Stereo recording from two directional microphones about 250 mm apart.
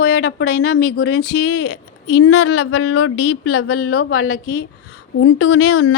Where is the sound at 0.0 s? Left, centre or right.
Left.